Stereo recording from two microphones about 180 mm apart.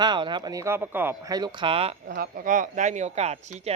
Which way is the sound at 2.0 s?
60° right (ahead or behind).